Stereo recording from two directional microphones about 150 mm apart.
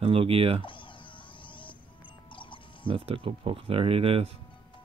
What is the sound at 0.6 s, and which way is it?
Music, 35° left (ahead or behind).